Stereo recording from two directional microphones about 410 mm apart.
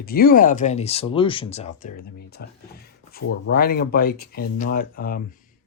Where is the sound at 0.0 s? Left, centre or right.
Left.